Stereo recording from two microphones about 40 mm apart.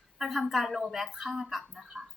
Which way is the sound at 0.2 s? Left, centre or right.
Centre.